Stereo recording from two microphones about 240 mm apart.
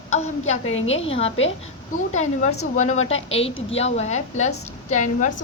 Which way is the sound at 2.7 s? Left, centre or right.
Left.